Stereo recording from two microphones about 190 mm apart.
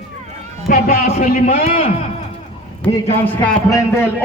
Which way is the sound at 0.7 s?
50° left (ahead or behind).